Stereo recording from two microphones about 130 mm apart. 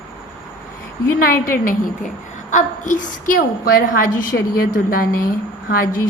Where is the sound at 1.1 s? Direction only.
90° left.